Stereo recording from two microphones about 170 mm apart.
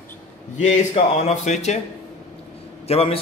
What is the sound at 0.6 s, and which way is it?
Speech, 45° left (ahead or behind).